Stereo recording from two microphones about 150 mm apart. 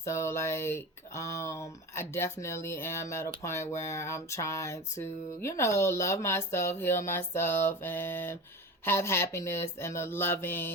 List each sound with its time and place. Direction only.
0.0 s speech: 15° left (ahead or behind)